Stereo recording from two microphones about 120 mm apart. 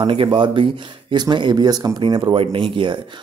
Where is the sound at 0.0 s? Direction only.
45° right (ahead or behind).